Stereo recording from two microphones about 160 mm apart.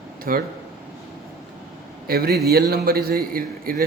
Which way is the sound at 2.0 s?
75° right (ahead or behind).